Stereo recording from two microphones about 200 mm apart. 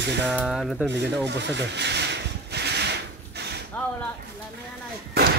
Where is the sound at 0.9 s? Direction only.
60° right (ahead or behind).